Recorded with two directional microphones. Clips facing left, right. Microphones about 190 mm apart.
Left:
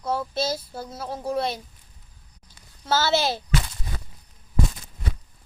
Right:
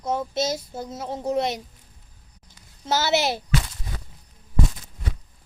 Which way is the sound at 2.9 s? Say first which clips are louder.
Even; 20° right (ahead or behind).